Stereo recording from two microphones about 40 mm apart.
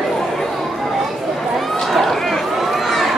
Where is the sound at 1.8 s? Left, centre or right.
Centre.